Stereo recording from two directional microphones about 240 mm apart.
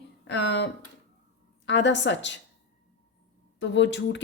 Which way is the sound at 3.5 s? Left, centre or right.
Left.